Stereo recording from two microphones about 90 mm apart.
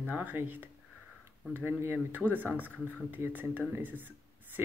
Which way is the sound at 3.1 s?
20° right (ahead or behind).